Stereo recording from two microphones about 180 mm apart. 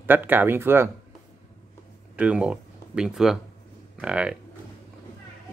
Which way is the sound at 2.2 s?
5° right (ahead or behind).